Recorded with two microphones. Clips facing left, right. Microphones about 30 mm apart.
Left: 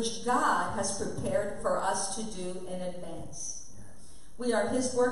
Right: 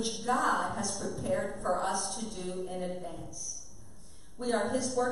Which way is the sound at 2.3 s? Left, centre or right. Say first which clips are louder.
Right 1 dB; centre.